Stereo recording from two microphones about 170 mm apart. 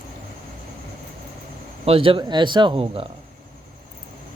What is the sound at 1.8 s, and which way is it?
Speech, 35° right (ahead or behind).